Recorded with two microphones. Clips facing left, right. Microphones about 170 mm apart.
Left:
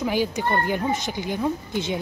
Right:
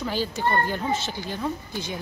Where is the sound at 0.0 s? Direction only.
15° left (ahead or behind).